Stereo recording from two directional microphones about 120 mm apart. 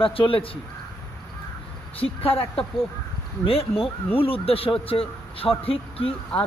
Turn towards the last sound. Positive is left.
turn(degrees=55)  # may be behind; listen again after turning